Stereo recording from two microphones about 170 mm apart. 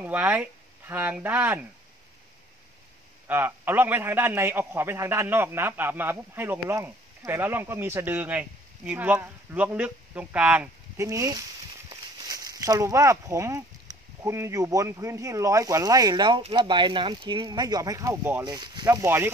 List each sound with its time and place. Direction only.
0.0 s speech: 10° right (ahead or behind)
3.3 s a man's voice: 10° right (ahead or behind)
18.4 s speech: 25° right (ahead or behind)